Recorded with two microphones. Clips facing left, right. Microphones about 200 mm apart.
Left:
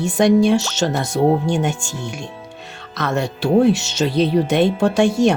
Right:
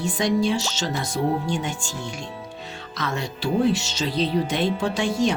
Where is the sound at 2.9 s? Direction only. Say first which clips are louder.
Left 7 dB; 65° left (ahead or behind).